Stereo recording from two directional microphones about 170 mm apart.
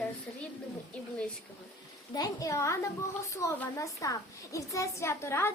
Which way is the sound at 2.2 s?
20° left (ahead or behind).